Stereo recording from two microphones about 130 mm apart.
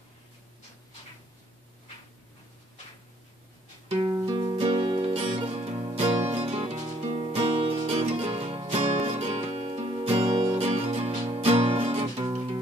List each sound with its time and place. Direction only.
4.1 s music: 30° right (ahead or behind); by 9.7 s 55° right (ahead or behind)
9.7 s music: 40° right (ahead or behind)
10.3 s music: 25° right (ahead or behind)
10.6 s music: 55° right (ahead or behind)